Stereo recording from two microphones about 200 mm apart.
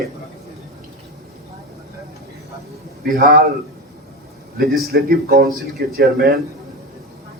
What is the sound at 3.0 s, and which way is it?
Speech, 45° right (ahead or behind).